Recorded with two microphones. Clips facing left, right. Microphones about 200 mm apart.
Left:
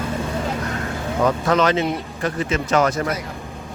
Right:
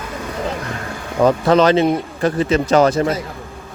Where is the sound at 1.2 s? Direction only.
30° right (ahead or behind).